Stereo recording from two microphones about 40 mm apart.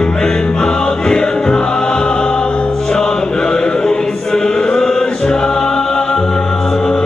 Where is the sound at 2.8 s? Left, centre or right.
Centre.